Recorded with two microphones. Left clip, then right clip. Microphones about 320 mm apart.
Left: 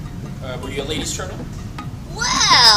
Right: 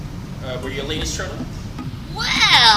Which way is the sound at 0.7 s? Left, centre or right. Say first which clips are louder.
Left 3 dB; centre.